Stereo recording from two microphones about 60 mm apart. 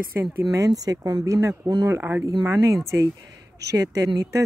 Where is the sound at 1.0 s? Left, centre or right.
Right.